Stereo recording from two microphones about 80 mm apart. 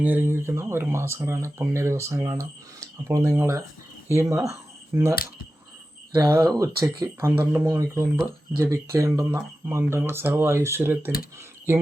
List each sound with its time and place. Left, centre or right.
0.0 s speech: right
4.9 s speech: right
6.4 s speech: right
7.3 s speech: right